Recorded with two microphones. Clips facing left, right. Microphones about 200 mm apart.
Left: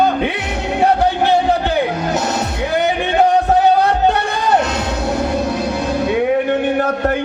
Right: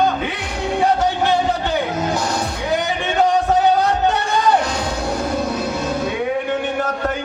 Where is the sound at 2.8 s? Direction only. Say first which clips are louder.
Left 6 dB; 60° left (ahead or behind).